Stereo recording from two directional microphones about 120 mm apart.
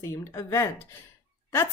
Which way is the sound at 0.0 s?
25° left (ahead or behind).